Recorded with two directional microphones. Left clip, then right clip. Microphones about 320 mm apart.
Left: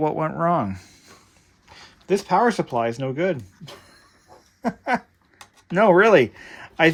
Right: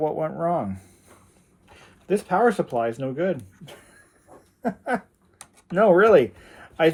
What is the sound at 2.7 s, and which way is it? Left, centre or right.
Speech, left.